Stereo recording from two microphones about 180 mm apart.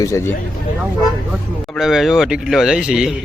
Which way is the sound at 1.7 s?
Centre (ahead or behind).